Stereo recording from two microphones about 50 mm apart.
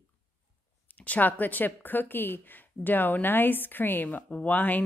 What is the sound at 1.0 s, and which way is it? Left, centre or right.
Speech, left.